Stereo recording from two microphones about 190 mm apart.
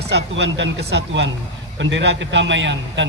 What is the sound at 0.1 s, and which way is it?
A man's voice, 70° right (ahead or behind).